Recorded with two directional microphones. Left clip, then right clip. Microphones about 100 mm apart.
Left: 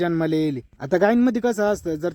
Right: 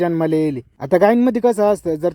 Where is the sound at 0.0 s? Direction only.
20° right (ahead or behind).